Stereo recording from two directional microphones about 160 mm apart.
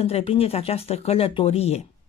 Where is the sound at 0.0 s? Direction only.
40° left (ahead or behind).